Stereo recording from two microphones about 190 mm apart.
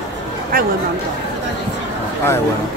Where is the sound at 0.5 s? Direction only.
50° right (ahead or behind).